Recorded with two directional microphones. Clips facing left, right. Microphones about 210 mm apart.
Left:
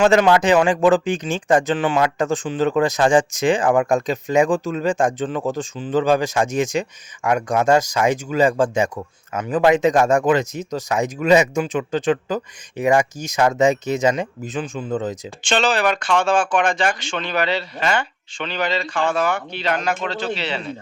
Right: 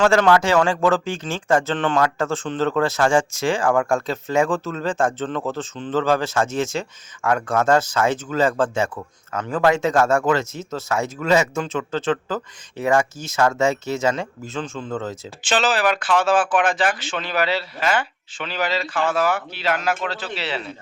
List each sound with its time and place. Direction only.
0.0 s speech: 20° left (ahead or behind)
15.4 s speech: 5° right (ahead or behind)